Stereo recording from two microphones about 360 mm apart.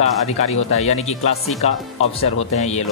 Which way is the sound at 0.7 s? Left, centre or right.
Centre.